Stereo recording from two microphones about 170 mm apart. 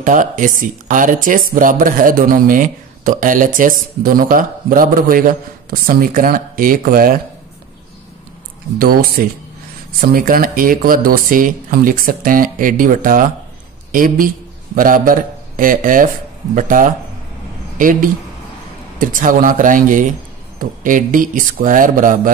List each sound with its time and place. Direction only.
0.0 s speech: 50° right (ahead or behind)
8.7 s speech: 60° right (ahead or behind)